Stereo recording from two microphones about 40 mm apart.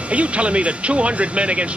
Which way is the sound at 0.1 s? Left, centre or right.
Right.